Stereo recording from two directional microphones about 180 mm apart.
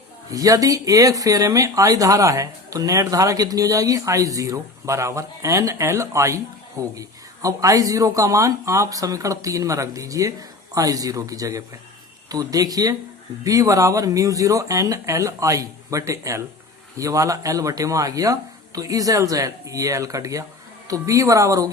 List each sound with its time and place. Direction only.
0.3 s speech: 20° right (ahead or behind)